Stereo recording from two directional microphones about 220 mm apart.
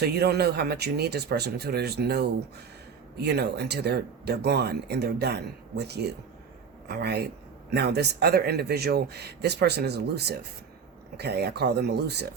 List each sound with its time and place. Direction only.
0.0 s speech: 45° right (ahead or behind)